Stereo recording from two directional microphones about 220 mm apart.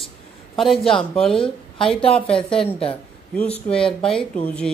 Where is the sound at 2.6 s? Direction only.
25° left (ahead or behind).